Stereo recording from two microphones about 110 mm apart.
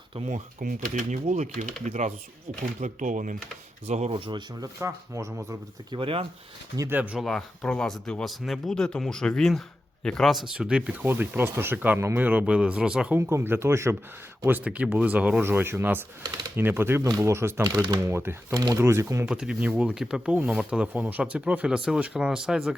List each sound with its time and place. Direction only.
1.1 s speech: 90° right
4.2 s speech: 45° right (ahead or behind)
4.6 s speech: 30° right (ahead or behind)
5.9 s speech: 55° right (ahead or behind)
6.9 s speech: 15° right (ahead or behind)
7.2 s speech: 5° left (ahead or behind)
10.5 s speech: 10° right (ahead or behind)
13.1 s speech: 20° right (ahead or behind)
17.8 s speech: 40° right (ahead or behind)
18.1 s speech: 20° right (ahead or behind)
18.5 s speech: 35° right (ahead or behind)
19.2 s speech: 5° right (ahead or behind)